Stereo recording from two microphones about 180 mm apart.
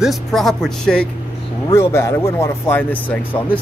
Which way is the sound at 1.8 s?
15° left (ahead or behind).